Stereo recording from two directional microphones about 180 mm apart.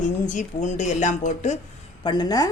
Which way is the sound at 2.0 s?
25° left (ahead or behind).